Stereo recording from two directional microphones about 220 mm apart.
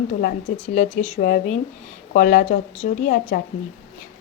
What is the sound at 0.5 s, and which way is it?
Speech, 30° left (ahead or behind).